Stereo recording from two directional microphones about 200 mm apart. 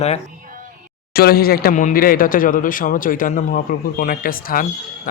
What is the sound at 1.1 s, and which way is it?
Speech, 50° left (ahead or behind).